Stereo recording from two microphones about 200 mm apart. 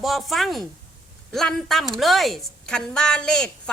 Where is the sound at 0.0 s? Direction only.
Centre (ahead or behind).